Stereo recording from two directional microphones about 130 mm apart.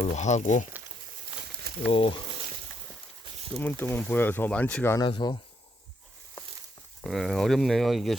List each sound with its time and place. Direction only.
0.0 s speech: 60° left (ahead or behind)
1.9 s speech: 45° left (ahead or behind)
3.7 s speech: 15° left (ahead or behind)
4.9 s speech: 35° left (ahead or behind)
7.0 s speech: centre (ahead or behind)